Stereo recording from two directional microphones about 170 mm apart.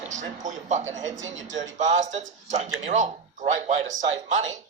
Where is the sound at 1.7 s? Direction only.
45° right (ahead or behind).